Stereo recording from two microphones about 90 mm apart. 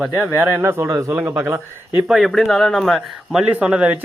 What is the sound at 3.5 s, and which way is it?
Speech, 15° right (ahead or behind).